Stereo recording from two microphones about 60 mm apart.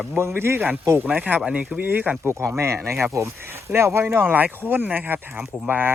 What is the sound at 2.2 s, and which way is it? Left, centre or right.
Speech, right.